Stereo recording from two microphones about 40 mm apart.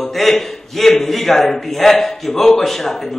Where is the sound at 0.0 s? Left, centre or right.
Centre.